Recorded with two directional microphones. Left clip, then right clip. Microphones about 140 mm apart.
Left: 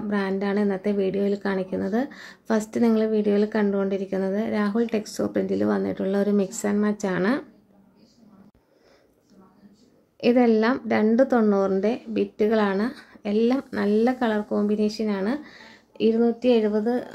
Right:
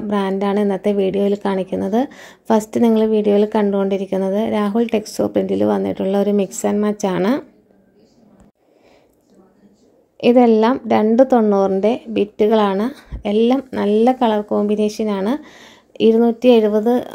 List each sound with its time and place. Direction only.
0.1 s speech: 35° right (ahead or behind)
10.1 s a woman's voice: 30° right (ahead or behind); by 17.1 s 50° right (ahead or behind)